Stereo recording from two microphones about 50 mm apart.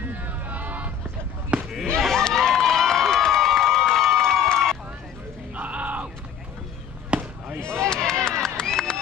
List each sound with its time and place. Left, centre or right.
0.1 s a sound: right
1.5 s basketball bounce: right
2.0 s a sound: centre
5.6 s music: right
7.1 s basketball bounce: right
7.6 s run: centre